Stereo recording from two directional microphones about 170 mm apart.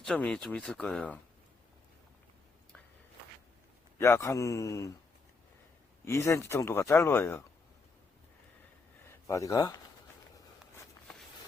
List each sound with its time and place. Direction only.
0.0 s speech: 5° left (ahead or behind)
3.9 s a man's voice: 15° left (ahead or behind)
6.1 s speech: 15° left (ahead or behind)
9.0 s speech: 15° left (ahead or behind)